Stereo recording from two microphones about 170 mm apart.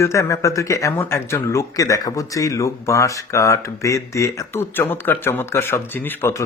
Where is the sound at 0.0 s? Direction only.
15° left (ahead or behind).